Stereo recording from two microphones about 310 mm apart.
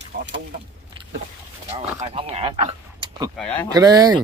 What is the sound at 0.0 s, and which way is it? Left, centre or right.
Chicken, right.